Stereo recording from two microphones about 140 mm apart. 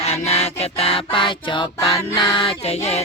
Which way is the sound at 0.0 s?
50° left (ahead or behind).